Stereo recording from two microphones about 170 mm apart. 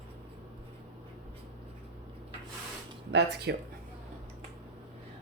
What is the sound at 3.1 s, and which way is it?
Speech, 80° right.